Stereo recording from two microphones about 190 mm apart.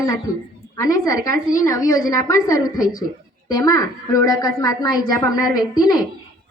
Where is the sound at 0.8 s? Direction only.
15° left (ahead or behind).